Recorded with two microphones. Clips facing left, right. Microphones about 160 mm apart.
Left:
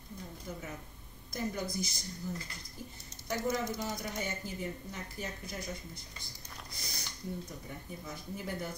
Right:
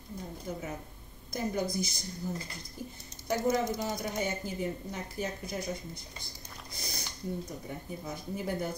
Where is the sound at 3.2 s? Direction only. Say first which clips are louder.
Right 5 dB; 20° right (ahead or behind).